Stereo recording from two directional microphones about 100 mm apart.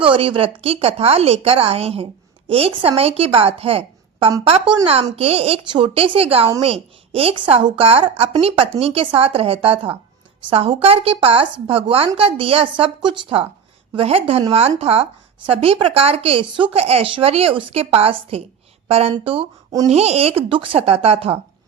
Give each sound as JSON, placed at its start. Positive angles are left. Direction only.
{"t": 0.0, "sound": "speech", "side_deg": -60}
{"t": 0.6, "sound": "a woman's voice", "side_deg": -85}
{"t": 2.5, "sound": "speech", "side_deg": -70}
{"t": 5.1, "sound": "speech", "side_deg": -85}
{"t": 5.7, "sound": "speech", "side_deg": -65}
{"t": 14.5, "sound": "a woman's voice", "side_deg": -90}
{"t": 15.4, "sound": "speech", "side_deg": -75}
{"t": 18.9, "sound": "speech", "side_deg": -85}
{"t": 19.2, "sound": "speech", "side_deg": -65}
{"t": 19.9, "sound": "speech", "side_deg": -90}